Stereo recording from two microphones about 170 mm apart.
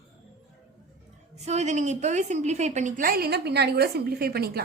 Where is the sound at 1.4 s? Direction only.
40° right (ahead or behind); by 4.6 s 65° right (ahead or behind).